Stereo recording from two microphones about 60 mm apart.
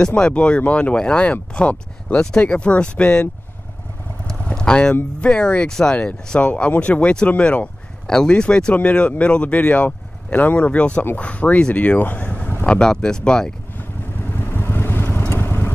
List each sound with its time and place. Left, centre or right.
0.0 s speech: centre
4.6 s speech: centre; by 12.2 s left
12.2 s vehicle: left
12.6 s speech: centre
13.7 s vehicle: left